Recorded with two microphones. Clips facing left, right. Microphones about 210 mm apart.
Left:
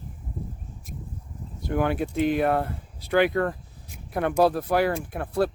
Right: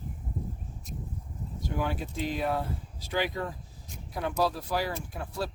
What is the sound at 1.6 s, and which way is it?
Speech, 60° left (ahead or behind).